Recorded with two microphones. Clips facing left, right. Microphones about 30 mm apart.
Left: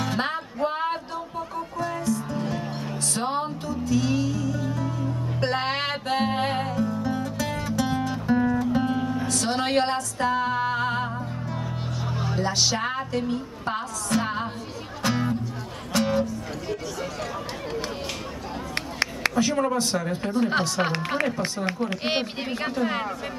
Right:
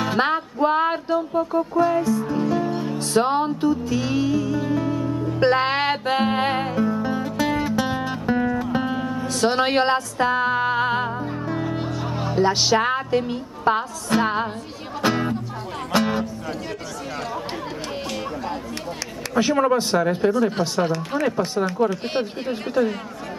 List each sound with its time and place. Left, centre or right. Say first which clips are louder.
0.0 s music: right 6 dB; centre
2.5 s music: right 8 dB; centre
9.3 s speech: right 6 dB; centre
15.0 s music: right 4 dB; right
15.9 s speech: right 4 dB; right
19.3 s speech: right 8 dB; right
20.3 s speech: right 2 dB; left
20.8 s speech: right 3 dB; left